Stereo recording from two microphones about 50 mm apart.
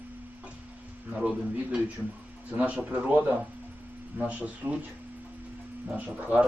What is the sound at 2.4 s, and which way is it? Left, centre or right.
Speech, right.